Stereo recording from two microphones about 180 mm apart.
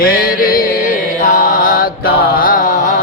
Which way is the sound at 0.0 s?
55° left (ahead or behind).